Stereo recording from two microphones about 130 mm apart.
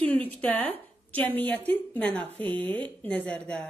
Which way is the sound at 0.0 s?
10° left (ahead or behind).